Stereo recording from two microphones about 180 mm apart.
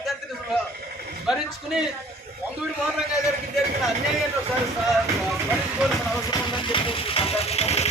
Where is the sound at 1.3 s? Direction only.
5° right (ahead or behind).